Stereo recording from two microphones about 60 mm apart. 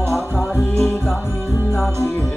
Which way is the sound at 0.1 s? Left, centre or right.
Centre.